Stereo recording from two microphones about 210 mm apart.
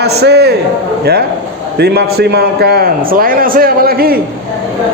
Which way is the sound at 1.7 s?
50° right (ahead or behind).